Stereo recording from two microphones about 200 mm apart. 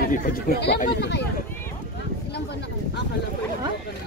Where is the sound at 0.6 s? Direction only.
55° left (ahead or behind).